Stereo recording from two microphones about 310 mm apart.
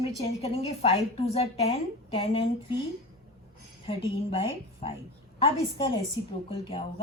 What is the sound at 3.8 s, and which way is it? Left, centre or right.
Speech, centre.